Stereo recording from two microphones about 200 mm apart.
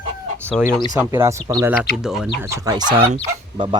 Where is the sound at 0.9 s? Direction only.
10° right (ahead or behind).